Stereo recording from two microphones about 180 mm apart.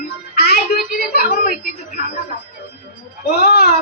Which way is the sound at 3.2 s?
60° left (ahead or behind).